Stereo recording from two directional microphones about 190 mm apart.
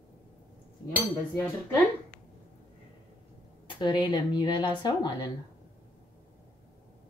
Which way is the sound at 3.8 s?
25° left (ahead or behind).